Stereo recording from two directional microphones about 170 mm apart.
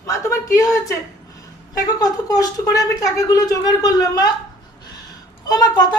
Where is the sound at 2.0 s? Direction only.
20° left (ahead or behind).